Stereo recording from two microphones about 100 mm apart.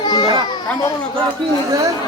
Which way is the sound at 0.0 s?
45° left (ahead or behind).